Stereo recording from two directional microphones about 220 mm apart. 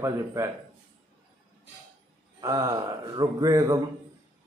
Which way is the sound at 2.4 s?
15° right (ahead or behind).